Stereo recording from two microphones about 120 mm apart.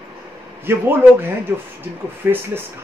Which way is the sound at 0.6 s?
20° right (ahead or behind).